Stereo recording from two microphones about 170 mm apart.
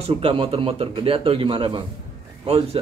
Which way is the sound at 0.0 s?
35° right (ahead or behind).